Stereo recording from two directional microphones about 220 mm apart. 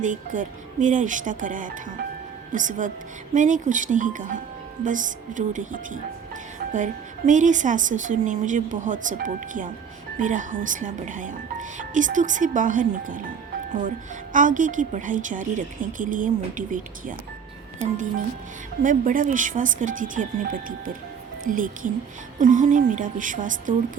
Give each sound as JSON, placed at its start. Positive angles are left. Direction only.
{"t": 0.0, "sound": "a woman's voice", "side_deg": -35}